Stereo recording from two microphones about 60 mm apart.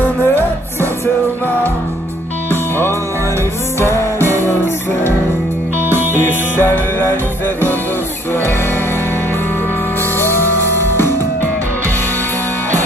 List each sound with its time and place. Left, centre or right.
0.0 s music: left
5.9 s music: right
6.6 s music: left
10.4 s music: right